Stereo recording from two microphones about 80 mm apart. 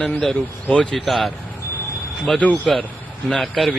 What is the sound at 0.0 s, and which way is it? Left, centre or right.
Speech, centre.